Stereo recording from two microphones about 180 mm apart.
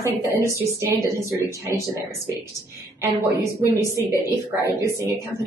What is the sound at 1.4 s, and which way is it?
Speech, 15° right (ahead or behind).